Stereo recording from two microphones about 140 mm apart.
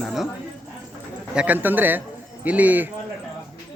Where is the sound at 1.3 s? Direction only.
10° right (ahead or behind).